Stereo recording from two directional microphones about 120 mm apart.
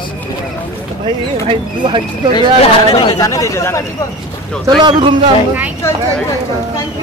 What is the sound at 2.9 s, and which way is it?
Speech, 40° left (ahead or behind).